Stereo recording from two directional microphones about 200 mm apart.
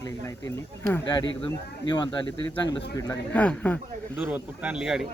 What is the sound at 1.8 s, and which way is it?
Speech, 25° left (ahead or behind).